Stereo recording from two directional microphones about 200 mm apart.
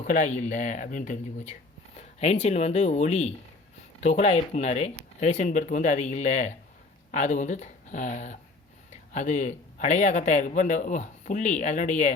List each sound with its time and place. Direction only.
0.0 s a man's voice: 40° left (ahead or behind)